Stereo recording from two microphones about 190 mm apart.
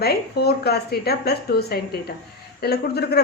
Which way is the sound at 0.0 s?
55° left (ahead or behind).